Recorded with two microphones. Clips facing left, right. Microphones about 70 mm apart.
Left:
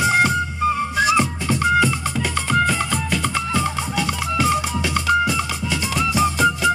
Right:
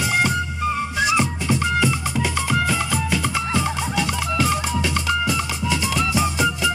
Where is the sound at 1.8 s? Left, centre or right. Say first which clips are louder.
Left 1 dB; centre.